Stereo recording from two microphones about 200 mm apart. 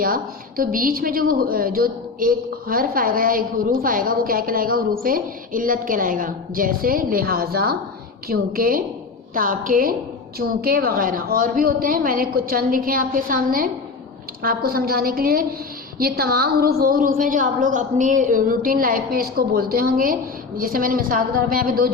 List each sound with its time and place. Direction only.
0.0 s a woman's voice: 45° right (ahead or behind)